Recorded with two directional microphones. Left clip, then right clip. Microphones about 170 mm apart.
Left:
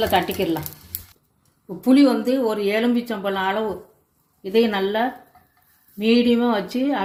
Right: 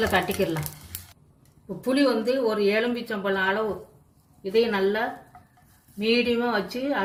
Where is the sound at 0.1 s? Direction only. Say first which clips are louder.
Left 4 dB; 45° left (ahead or behind).